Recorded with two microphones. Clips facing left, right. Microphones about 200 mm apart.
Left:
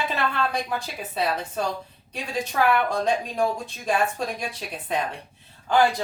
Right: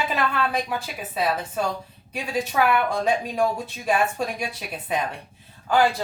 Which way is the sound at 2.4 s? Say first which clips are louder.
Even; 5° right (ahead or behind).